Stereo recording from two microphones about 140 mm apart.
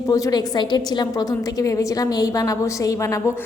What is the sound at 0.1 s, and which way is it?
A woman's voice, 25° left (ahead or behind).